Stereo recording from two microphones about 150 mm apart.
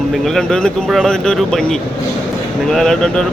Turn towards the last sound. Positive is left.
turn(degrees=5)  # may be behind; listen again after turning